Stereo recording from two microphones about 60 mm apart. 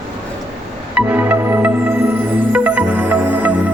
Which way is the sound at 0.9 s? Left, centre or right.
Right.